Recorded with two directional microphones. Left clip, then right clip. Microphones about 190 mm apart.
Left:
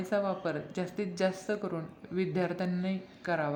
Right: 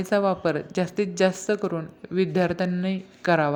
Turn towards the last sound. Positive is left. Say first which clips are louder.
# right 10 dB
turn(degrees=-30)  # may be behind; listen again after turning